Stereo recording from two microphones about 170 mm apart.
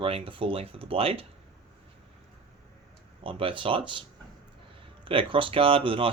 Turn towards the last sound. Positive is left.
turn(degrees=-30)  # may be behind; listen again after turning